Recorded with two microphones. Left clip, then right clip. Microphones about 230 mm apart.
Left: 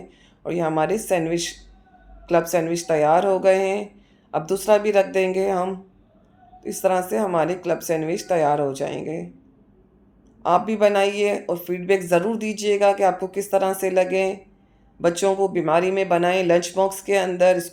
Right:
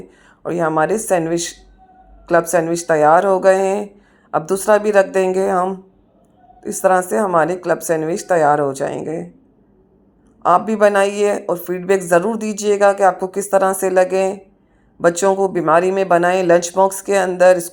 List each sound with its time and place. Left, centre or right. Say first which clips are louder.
0.4 s speech: right 5 dB; right
10.4 s speech: right 5 dB; right